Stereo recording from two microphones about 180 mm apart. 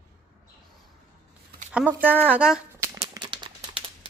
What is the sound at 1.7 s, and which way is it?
Speech, 10° right (ahead or behind).